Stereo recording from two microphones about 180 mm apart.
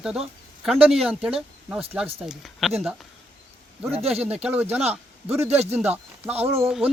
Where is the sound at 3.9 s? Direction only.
35° right (ahead or behind).